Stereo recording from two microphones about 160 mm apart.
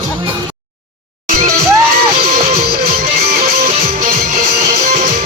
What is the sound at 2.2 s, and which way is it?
Music, 70° right (ahead or behind).